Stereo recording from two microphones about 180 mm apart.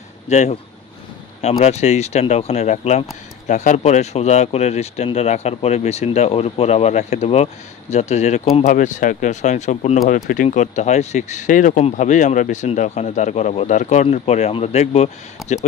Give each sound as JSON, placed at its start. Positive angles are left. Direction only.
{"t": 0.3, "sound": "speech", "side_deg": 40}